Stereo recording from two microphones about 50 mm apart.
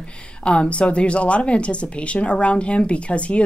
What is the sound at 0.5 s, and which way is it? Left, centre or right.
Speech, left.